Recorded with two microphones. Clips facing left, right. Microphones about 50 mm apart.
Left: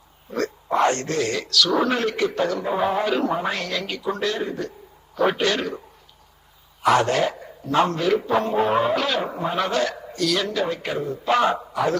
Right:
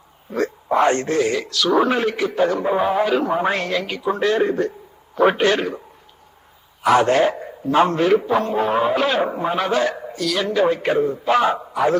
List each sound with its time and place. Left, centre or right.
0.3 s a man's voice: centre
2.7 s a man's voice: centre
3.3 s speech: right
4.3 s a man's voice: right
5.1 s speech: right
7.1 s speech: right
8.3 s speech: centre
8.9 s a man's voice: right
9.8 s a man's voice: right
10.2 s speech: centre
10.4 s speech: right
11.3 s a man's voice: centre